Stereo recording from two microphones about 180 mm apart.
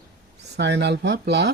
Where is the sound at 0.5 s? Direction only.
70° right (ahead or behind).